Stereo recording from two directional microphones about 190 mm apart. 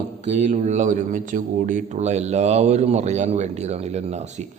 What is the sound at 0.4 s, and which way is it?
A man's voice, 40° right (ahead or behind).